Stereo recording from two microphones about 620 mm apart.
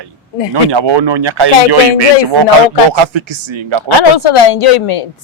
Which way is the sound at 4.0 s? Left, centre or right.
Left.